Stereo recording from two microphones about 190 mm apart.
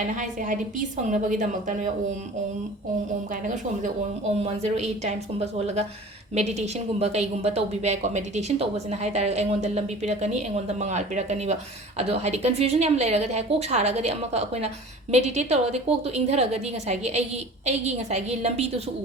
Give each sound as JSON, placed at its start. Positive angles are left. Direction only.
{"t": 0.2, "sound": "a woman's voice", "side_deg": -45}
{"t": 4.6, "sound": "a woman's voice", "side_deg": -35}
{"t": 6.3, "sound": "a woman's voice", "side_deg": -35}